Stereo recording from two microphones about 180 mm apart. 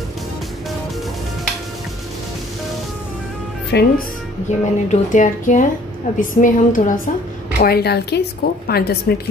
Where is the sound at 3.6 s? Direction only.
65° left (ahead or behind).